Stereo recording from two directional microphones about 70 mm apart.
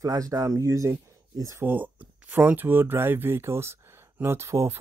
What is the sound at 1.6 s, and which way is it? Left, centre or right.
Speech, right.